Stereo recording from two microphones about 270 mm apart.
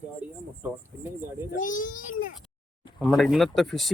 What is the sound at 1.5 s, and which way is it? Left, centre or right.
Speech, left.